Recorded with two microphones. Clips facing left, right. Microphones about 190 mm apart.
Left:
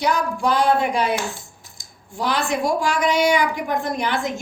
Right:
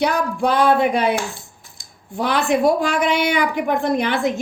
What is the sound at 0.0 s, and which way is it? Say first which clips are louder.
Speech: right 2 dB; 60° right (ahead or behind).